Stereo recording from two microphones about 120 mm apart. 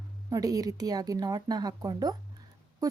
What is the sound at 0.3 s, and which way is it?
Speech, 30° right (ahead or behind).